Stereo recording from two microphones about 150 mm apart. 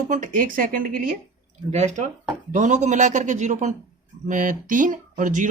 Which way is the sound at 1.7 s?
50° right (ahead or behind).